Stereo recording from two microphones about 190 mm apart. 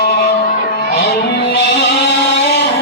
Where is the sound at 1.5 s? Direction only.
60° left (ahead or behind).